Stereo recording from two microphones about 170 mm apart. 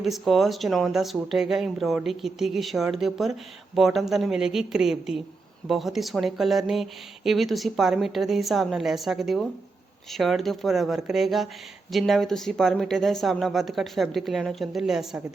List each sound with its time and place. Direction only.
0.0 s speech: centre (ahead or behind)